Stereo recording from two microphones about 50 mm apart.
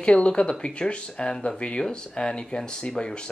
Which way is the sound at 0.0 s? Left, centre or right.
Centre.